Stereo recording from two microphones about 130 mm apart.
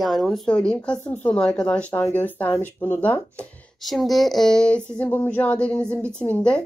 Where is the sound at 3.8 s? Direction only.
Centre (ahead or behind).